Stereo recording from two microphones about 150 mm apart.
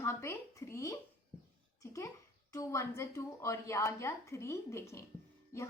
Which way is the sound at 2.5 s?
20° left (ahead or behind).